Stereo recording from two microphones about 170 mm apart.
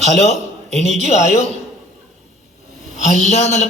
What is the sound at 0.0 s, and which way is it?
A man's voice, 40° left (ahead or behind).